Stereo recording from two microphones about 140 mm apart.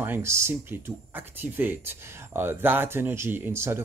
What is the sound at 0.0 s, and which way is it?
Speech, 15° right (ahead or behind).